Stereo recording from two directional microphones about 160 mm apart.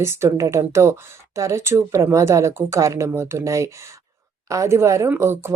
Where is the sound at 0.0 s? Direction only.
15° right (ahead or behind).